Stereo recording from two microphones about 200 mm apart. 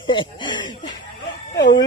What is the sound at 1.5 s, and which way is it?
Chicken, 60° left (ahead or behind).